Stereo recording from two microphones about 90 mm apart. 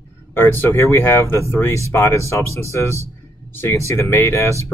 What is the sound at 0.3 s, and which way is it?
Speech, 25° left (ahead or behind).